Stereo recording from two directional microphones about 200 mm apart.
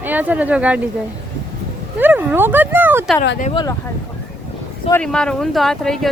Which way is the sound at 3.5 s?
25° left (ahead or behind).